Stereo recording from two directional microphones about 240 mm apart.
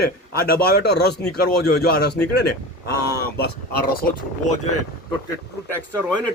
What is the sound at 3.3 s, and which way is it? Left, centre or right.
Speech, left.